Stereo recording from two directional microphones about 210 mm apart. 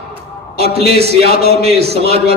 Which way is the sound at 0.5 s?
30° right (ahead or behind).